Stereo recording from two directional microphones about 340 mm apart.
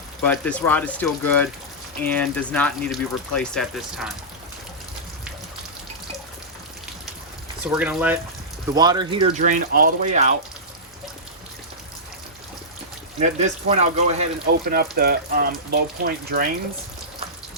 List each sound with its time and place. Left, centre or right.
0.3 s speech: centre
7.6 s speech: centre; by 10.2 s right
13.1 s speech: centre